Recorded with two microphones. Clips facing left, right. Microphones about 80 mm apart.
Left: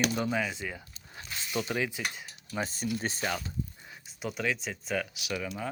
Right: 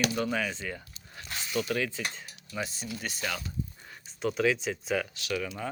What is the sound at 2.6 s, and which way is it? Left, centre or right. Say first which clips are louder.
Speech: left 3 dB; left.